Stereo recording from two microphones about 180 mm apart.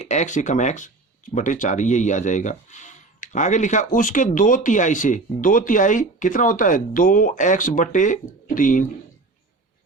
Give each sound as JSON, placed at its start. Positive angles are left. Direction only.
{"t": 0.0, "sound": "speech", "side_deg": 40}